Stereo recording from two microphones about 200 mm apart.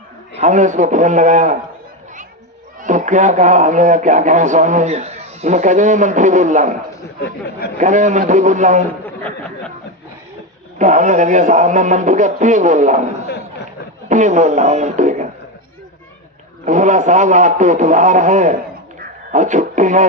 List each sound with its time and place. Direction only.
0.4 s a man's voice: 40° right (ahead or behind)
2.8 s a man's voice: 40° right (ahead or behind)
7.8 s a man's voice: 40° right (ahead or behind)
10.8 s a man's voice: 40° right (ahead or behind)
14.1 s speech: 35° right (ahead or behind)
16.6 s a man's voice: 40° right (ahead or behind)